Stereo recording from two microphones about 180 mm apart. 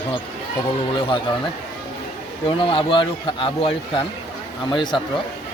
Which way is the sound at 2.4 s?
30° left (ahead or behind).